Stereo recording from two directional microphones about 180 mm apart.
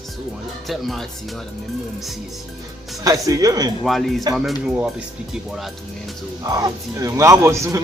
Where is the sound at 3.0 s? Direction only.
20° right (ahead or behind).